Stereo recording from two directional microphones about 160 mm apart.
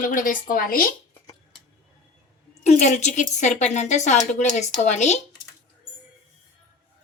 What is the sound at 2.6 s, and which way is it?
A woman's voice, 45° left (ahead or behind).